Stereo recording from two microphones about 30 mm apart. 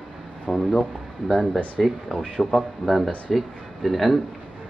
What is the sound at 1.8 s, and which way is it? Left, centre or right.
Speech, centre.